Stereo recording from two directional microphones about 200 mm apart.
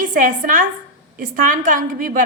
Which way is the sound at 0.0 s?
40° right (ahead or behind).